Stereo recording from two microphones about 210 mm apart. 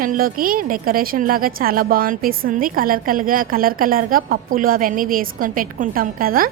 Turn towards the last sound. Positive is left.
turn(degrees=-45)  # may be behind; listen again after turning